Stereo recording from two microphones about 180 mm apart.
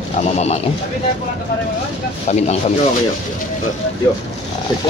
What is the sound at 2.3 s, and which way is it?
Speech, 40° left (ahead or behind).